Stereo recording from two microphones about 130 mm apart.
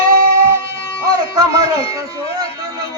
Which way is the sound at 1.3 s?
30° right (ahead or behind).